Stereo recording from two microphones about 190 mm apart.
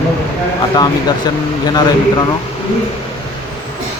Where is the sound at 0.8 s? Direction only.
20° left (ahead or behind).